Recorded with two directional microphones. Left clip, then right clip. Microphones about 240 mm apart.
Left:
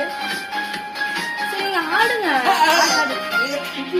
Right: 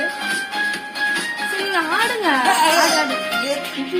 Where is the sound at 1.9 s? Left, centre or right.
Centre.